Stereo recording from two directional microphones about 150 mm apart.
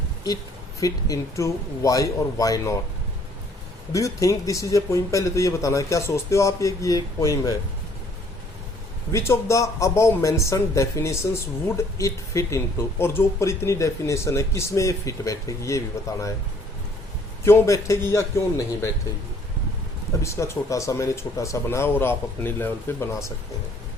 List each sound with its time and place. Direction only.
0.8 s speech: 25° left (ahead or behind)
3.9 s speech: 20° left (ahead or behind)
9.1 s speech: 20° left (ahead or behind)
17.4 s speech: 20° left (ahead or behind)
20.2 s speech: 20° left (ahead or behind)